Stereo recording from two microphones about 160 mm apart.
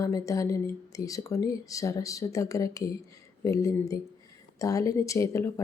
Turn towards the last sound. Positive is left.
turn(degrees=20)  # may be behind; listen again after turning